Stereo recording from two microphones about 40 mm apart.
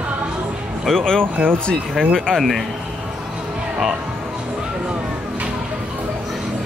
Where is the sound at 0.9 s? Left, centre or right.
Centre.